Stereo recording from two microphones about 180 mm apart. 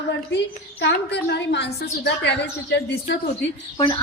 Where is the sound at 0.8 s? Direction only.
70° left (ahead or behind).